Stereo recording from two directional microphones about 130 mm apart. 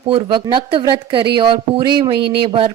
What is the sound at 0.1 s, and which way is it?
Speech, 40° right (ahead or behind).